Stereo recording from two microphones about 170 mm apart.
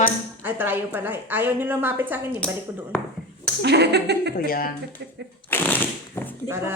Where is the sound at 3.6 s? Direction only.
75° right (ahead or behind).